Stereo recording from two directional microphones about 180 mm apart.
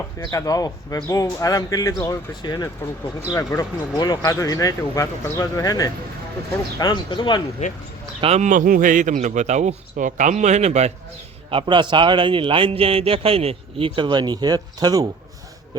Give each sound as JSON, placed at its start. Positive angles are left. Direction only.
{"t": 0.2, "sound": "speech", "side_deg": 20}
{"t": 8.2, "sound": "speech", "side_deg": -40}
{"t": 11.5, "sound": "a man's voice", "side_deg": -25}